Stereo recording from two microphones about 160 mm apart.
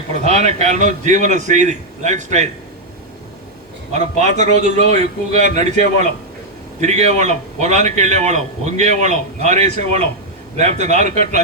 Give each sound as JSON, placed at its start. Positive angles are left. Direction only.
{"t": 0.1, "sound": "a man's voice", "side_deg": -45}
{"t": 3.9, "sound": "a man's voice", "side_deg": -50}